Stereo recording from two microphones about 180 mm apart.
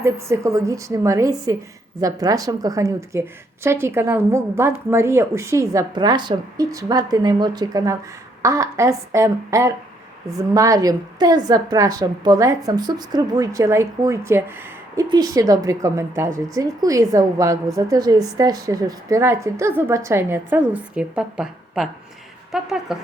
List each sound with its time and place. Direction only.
0.0 s a woman's voice: 15° right (ahead or behind)